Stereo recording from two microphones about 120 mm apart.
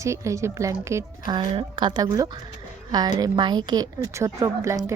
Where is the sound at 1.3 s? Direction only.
40° right (ahead or behind).